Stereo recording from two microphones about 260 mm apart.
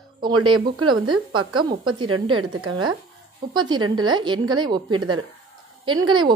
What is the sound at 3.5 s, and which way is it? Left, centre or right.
A woman's voice, centre.